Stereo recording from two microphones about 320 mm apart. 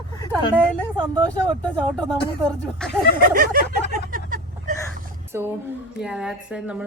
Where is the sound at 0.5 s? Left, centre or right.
Centre.